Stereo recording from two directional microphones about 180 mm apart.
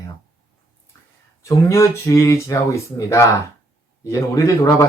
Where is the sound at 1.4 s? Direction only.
15° left (ahead or behind).